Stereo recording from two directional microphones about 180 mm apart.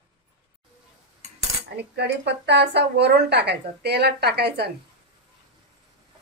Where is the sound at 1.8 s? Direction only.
65° right (ahead or behind).